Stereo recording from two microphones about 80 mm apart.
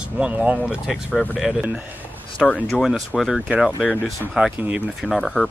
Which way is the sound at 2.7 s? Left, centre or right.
Centre.